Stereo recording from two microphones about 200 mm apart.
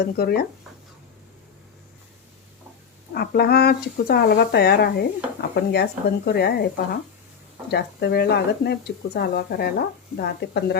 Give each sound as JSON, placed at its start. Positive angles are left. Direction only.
{"t": 0.0, "sound": "speech", "side_deg": 50}
{"t": 3.2, "sound": "speech", "side_deg": 50}
{"t": 7.7, "sound": "speech", "side_deg": 55}